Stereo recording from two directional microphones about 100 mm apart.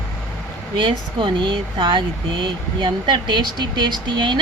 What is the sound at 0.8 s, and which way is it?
Speech, 50° right (ahead or behind).